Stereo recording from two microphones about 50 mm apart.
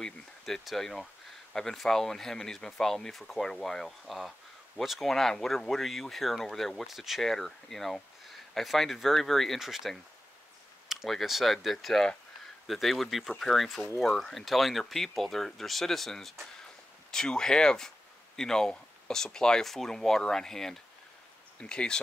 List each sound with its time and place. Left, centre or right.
0.7 s speech: centre
9.6 s speech: centre
11.1 s speech: centre
21.5 s speech: centre